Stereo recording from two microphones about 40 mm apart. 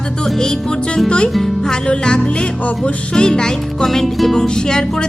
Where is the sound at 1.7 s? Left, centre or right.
Left.